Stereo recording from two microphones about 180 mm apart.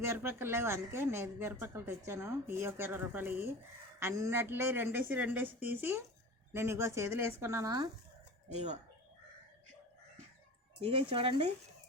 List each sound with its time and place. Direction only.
0.0 s a woman's voice: 15° right (ahead or behind)
8.5 s speech: 40° right (ahead or behind)
10.8 s speech: 30° right (ahead or behind)